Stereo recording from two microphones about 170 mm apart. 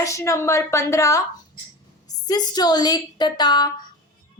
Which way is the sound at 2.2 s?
25° left (ahead or behind).